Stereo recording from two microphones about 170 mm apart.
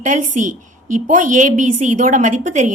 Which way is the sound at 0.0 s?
50° right (ahead or behind).